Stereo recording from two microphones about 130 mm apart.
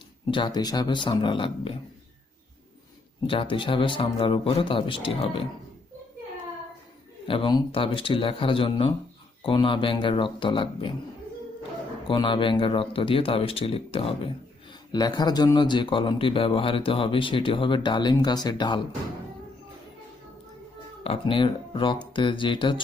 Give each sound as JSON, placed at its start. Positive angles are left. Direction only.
{"t": 0.3, "sound": "speech", "side_deg": 35}
{"t": 3.2, "sound": "speech", "side_deg": 40}
{"t": 7.3, "sound": "speech", "side_deg": 40}
{"t": 12.0, "sound": "speech", "side_deg": 40}
{"t": 14.9, "sound": "speech", "side_deg": 30}
{"t": 21.0, "sound": "speech", "side_deg": 45}